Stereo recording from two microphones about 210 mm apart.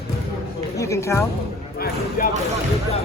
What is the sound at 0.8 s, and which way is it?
Speech, 15° left (ahead or behind).